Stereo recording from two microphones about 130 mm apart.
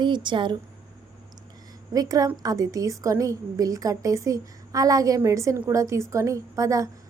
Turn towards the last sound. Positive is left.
turn(degrees=-25)  # may be behind; listen again after turning